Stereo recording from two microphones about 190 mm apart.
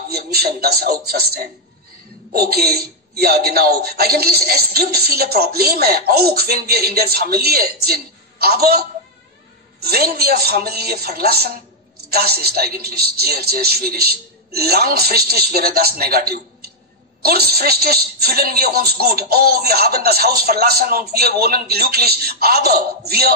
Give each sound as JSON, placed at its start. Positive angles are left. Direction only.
{"t": 0.1, "sound": "speech", "side_deg": -55}